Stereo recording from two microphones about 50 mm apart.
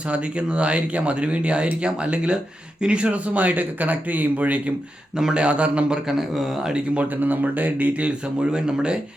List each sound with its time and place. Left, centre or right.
0.1 s speech: right
6.1 s speech: centre
6.7 s speech: right
8.4 s speech: centre